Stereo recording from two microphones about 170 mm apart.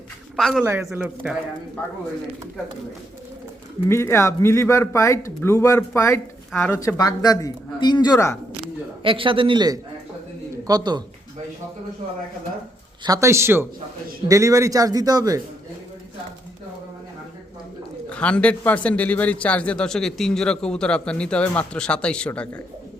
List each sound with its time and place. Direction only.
0.3 s speech: centre (ahead or behind)
0.6 s speech: 15° right (ahead or behind)
3.8 s a man's voice: 15° left (ahead or behind)
6.7 s speech: 20° left (ahead or behind)
8.6 s a man's voice: 30° right (ahead or behind)
13.1 s speech: 15° right (ahead or behind)
18.1 s a man's voice: 5° left (ahead or behind)